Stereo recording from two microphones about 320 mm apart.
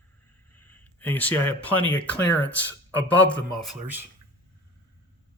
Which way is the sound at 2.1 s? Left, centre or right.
Centre.